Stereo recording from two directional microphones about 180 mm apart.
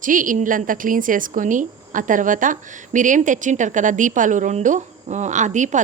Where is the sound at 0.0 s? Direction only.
45° right (ahead or behind).